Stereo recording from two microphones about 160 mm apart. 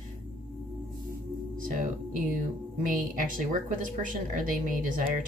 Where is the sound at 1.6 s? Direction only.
60° right (ahead or behind).